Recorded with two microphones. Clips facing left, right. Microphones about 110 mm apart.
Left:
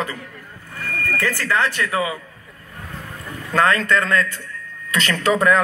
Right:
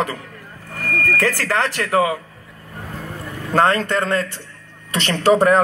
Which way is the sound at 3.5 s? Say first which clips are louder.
Right 1 dB; 35° right (ahead or behind).